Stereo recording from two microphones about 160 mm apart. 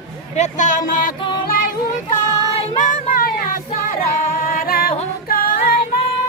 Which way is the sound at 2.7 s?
50° left (ahead or behind).